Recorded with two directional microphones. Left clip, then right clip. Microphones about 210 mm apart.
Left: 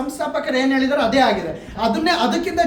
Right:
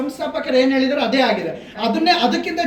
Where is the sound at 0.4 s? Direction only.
25° left (ahead or behind).